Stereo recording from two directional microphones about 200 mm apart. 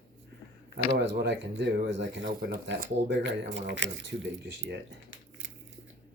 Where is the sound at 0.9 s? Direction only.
55° right (ahead or behind).